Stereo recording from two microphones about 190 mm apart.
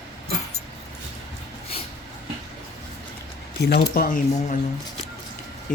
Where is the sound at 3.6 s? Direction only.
60° left (ahead or behind).